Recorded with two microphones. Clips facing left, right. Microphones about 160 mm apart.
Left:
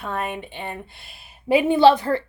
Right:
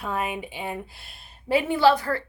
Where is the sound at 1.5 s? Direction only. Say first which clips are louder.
Left 5 dB; 20° left (ahead or behind).